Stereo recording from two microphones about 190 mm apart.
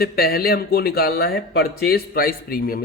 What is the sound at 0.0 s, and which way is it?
Speech, 55° left (ahead or behind).